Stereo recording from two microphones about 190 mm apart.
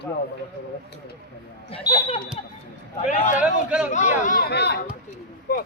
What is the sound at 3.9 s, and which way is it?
A man's voice, 40° left (ahead or behind).